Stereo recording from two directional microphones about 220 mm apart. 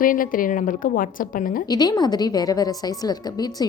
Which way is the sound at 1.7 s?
20° left (ahead or behind).